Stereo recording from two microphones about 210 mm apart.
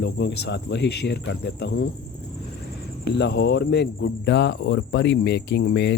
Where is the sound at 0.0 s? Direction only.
55° left (ahead or behind).